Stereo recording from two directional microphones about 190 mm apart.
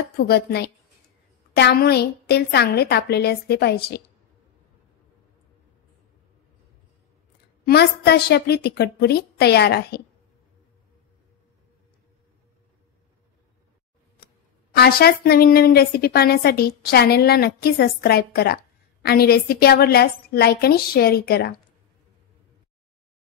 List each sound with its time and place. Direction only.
0.2 s a woman's voice: 60° left (ahead or behind)
7.6 s a woman's voice: 55° left (ahead or behind)
14.8 s a woman's voice: 55° left (ahead or behind)